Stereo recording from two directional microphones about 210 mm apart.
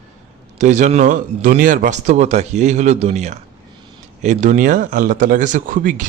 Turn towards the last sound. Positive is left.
turn(degrees=-40)  # may be behind; listen again after turning